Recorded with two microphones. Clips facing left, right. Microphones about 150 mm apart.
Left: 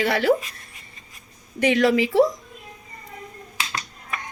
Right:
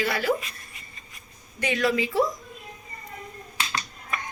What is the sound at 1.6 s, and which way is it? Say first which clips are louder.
Speech: left 6 dB; 85° left.